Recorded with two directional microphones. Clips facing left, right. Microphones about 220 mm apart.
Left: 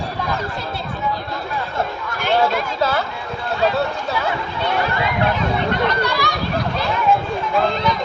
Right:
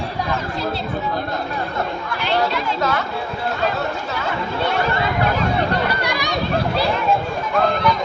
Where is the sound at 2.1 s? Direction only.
50° left (ahead or behind).